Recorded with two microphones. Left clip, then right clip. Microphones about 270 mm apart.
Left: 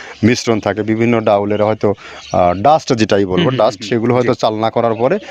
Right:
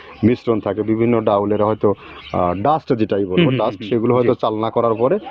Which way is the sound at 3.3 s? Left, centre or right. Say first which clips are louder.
Left 2 dB; centre.